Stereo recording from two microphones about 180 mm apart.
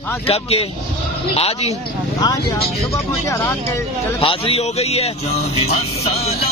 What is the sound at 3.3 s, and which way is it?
Speech, 15° left (ahead or behind).